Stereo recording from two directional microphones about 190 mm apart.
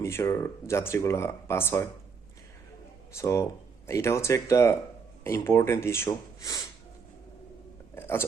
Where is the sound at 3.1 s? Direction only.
15° left (ahead or behind).